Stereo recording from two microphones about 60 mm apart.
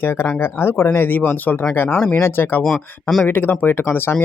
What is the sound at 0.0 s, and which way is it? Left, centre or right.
Speech, left.